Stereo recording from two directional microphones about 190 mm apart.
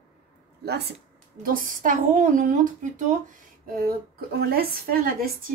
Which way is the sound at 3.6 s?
50° right (ahead or behind).